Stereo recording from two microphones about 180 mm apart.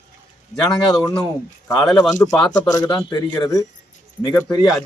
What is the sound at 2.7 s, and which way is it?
Speech, 20° left (ahead or behind).